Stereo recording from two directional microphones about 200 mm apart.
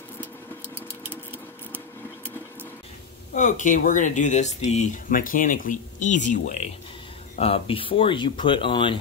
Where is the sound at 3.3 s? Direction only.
40° left (ahead or behind).